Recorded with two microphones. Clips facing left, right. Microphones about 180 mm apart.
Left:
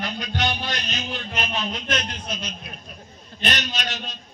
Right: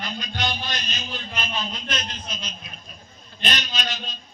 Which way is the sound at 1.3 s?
60° left (ahead or behind).